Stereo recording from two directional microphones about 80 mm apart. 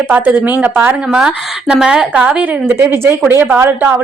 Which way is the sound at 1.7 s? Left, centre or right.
Centre.